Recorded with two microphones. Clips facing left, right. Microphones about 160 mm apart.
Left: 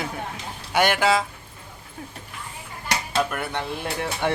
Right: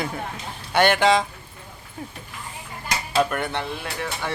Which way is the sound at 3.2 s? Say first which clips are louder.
Right 4 dB; 5° left (ahead or behind).